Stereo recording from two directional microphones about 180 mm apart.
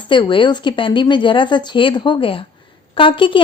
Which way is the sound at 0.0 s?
25° left (ahead or behind).